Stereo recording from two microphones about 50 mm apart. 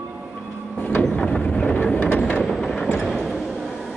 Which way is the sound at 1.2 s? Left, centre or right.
Centre.